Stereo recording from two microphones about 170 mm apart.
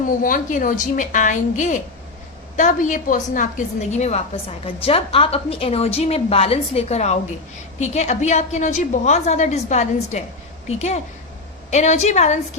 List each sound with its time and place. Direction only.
0.2 s a woman's voice: 50° left (ahead or behind)